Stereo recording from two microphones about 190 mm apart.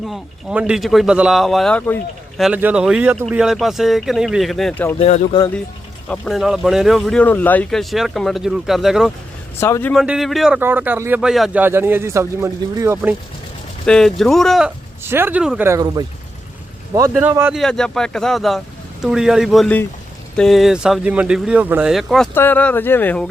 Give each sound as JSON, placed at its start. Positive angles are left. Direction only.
{"t": 0.1, "sound": "speech", "side_deg": 0}
{"t": 2.4, "sound": "speech", "side_deg": -10}
{"t": 4.9, "sound": "speech", "side_deg": 35}
{"t": 6.1, "sound": "speech", "side_deg": 0}
{"t": 9.6, "sound": "speech", "side_deg": 15}
{"t": 9.9, "sound": "speech", "side_deg": 0}
{"t": 13.8, "sound": "speech", "side_deg": 5}
{"t": 15.0, "sound": "speech", "side_deg": -10}
{"t": 17.2, "sound": "speech", "side_deg": -10}
{"t": 17.6, "sound": "speech", "side_deg": 5}